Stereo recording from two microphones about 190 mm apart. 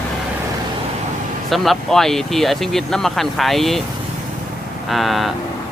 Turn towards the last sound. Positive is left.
turn(degrees=0)  # may be behind; listen again after turning